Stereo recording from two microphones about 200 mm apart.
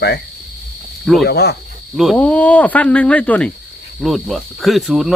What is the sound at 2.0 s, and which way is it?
Speech, 5° left (ahead or behind).